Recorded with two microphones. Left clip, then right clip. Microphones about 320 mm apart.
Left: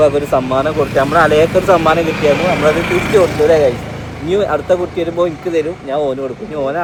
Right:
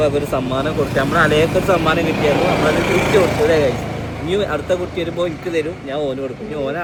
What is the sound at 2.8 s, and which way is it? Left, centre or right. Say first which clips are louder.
Speech: left 2 dB; right.